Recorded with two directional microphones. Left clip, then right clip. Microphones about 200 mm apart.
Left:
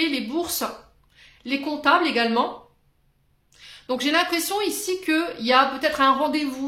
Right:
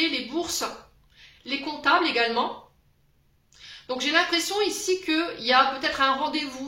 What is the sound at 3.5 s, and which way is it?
A woman's voice, 55° left (ahead or behind).